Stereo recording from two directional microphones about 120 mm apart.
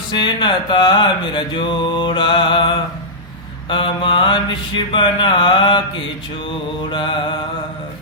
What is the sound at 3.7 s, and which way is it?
Mantra, 45° left (ahead or behind).